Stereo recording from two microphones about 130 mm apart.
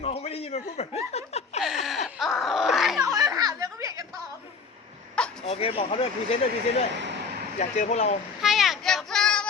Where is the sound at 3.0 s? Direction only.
30° right (ahead or behind).